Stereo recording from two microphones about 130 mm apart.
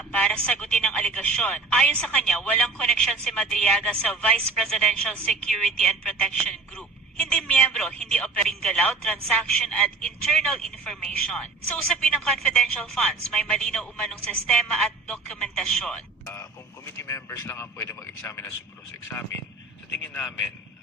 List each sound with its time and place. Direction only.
0.1 s speech: 10° left (ahead or behind)
17.0 s speech: 20° left (ahead or behind)